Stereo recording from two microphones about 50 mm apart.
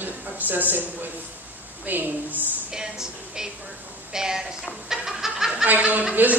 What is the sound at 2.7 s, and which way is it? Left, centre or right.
Speech, centre.